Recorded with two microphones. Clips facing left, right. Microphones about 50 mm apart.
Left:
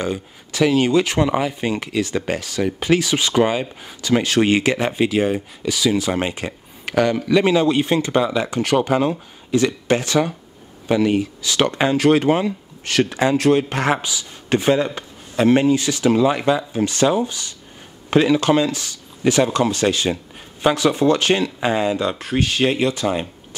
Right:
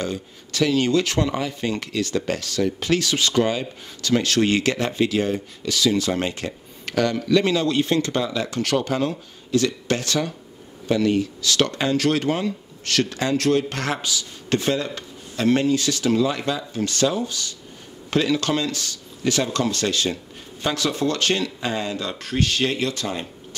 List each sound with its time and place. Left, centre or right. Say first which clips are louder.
0.0 s speech: left 3 dB; centre